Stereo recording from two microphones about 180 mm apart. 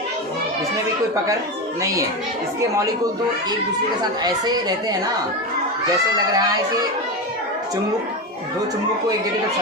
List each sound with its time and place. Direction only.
1.8 s speech: 15° right (ahead or behind)
4.0 s speech: 20° right (ahead or behind)
6.1 s speech: 20° right (ahead or behind)